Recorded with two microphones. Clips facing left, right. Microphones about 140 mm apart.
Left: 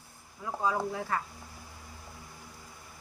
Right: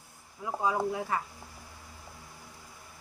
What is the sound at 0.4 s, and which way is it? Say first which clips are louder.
Speech: right 1 dB; 15° right (ahead or behind).